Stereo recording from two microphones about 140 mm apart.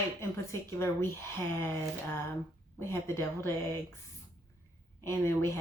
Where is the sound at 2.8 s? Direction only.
20° left (ahead or behind).